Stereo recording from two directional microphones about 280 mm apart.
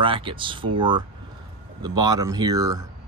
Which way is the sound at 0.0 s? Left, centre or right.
Centre.